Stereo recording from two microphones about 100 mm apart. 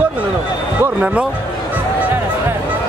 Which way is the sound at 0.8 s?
15° right (ahead or behind).